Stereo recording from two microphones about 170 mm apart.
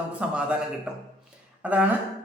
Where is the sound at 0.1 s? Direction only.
5° right (ahead or behind).